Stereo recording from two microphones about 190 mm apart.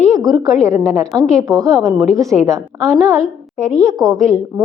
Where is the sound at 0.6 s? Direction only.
15° right (ahead or behind).